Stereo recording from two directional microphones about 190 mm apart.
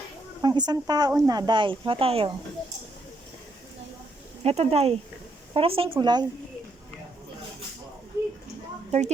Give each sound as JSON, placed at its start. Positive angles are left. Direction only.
{"t": 0.4, "sound": "speech", "side_deg": -20}
{"t": 4.4, "sound": "speech", "side_deg": -30}
{"t": 8.9, "sound": "a woman's voice", "side_deg": -35}